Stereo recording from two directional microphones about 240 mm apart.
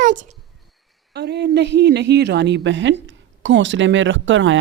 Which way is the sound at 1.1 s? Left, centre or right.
Right.